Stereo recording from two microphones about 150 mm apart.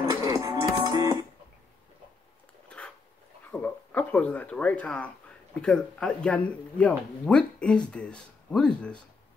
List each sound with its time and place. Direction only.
0.0 s music: 25° right (ahead or behind)
3.6 s speech: 10° left (ahead or behind)